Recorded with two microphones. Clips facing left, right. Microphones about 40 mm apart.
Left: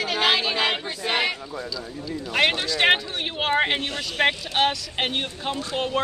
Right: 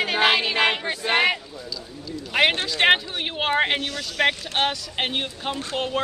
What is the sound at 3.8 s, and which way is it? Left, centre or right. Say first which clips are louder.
Speech: even; left.